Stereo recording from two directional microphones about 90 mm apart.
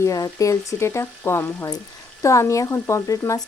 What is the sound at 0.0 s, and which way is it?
Speech, 40° left (ahead or behind).